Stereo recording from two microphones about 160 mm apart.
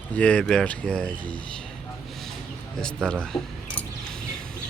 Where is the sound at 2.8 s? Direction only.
5° left (ahead or behind).